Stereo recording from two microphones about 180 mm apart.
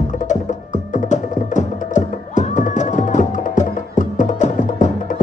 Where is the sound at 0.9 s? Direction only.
45° left (ahead or behind).